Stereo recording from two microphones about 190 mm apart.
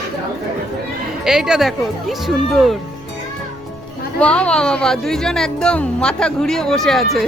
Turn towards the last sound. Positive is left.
turn(degrees=0)  # may be behind; listen again after turning